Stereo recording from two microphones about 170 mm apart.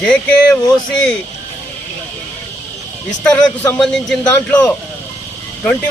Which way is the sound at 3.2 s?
20° left (ahead or behind).